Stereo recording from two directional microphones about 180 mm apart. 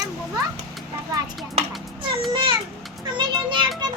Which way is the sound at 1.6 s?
30° right (ahead or behind).